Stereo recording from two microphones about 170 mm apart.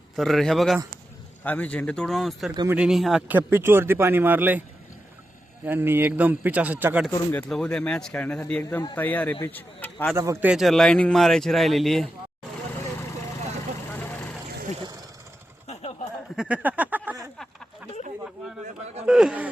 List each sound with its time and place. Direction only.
0.2 s speech: centre (ahead or behind)
5.6 s speech: 15° right (ahead or behind)
7.1 s speech: 15° left (ahead or behind)
7.5 s speech: 5° left (ahead or behind)
10.2 s speech: 15° right (ahead or behind)
10.5 s speech: centre (ahead or behind)
13.9 s vehicle: 10° left (ahead or behind)
15.6 s a sound: 35° left (ahead or behind)
16.3 s a sound: 5° right (ahead or behind)
19.0 s a sound: 5° right (ahead or behind)